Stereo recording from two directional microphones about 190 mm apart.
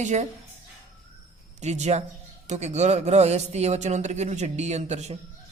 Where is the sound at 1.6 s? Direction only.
35° right (ahead or behind).